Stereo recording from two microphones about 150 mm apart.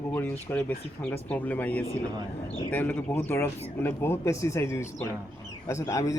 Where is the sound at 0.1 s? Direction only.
10° left (ahead or behind).